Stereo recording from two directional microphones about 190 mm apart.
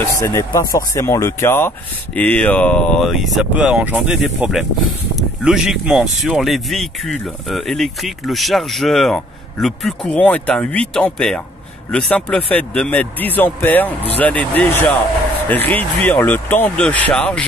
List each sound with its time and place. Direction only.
0.0 s speech: 15° left (ahead or behind)